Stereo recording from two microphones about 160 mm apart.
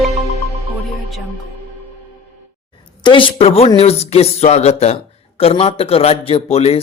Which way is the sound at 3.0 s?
30° left (ahead or behind).